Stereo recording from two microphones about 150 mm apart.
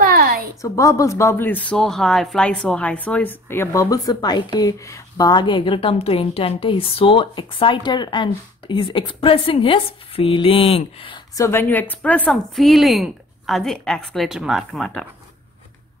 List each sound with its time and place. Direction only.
0.0 s a sound: 75° right (ahead or behind)
0.6 s speech: 20° left (ahead or behind)
11.3 s a woman's voice: 20° left (ahead or behind); by 15.0 s centre (ahead or behind)